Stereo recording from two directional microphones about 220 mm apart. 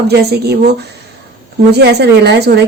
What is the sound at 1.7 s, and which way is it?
Speech, 50° right (ahead or behind).